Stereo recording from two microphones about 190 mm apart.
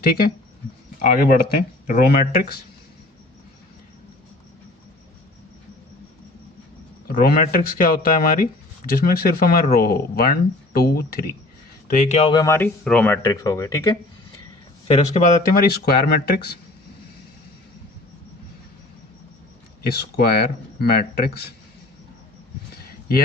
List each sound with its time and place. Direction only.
1.0 s speech: 50° left (ahead or behind)
7.1 s speech: 50° left (ahead or behind)
11.9 s speech: 40° left (ahead or behind); by 14.0 s 20° left (ahead or behind)
14.8 s speech: 30° left (ahead or behind); by 16.6 s 55° left (ahead or behind)
19.8 s speech: 55° left (ahead or behind)
22.9 s a sound: 50° left (ahead or behind)